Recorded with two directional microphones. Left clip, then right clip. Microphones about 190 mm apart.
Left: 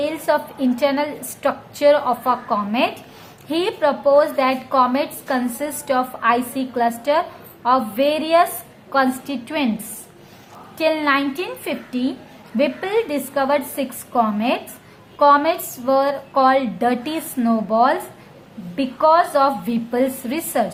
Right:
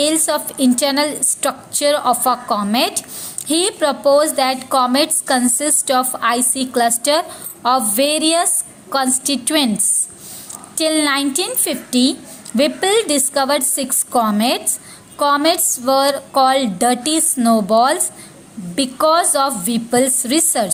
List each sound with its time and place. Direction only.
0.0 s a woman's voice: 25° right (ahead or behind)
10.8 s a woman's voice: 25° right (ahead or behind)